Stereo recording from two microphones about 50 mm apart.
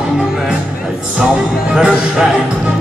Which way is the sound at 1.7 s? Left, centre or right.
Centre.